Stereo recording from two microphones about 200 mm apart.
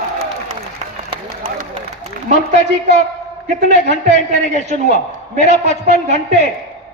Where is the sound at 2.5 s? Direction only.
35° right (ahead or behind).